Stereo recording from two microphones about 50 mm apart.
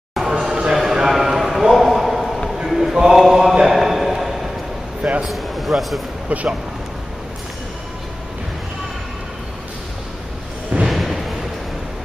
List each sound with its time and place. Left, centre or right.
0.1 s a sound: centre
6.2 s speech: right
10.9 s music: centre